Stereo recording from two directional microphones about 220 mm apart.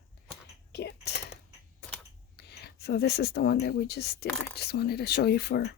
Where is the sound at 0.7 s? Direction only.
50° left (ahead or behind).